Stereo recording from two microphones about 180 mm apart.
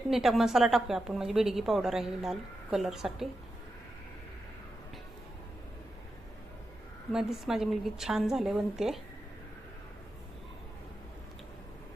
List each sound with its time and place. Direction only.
0.1 s a woman's voice: centre (ahead or behind)
7.1 s a woman's voice: centre (ahead or behind)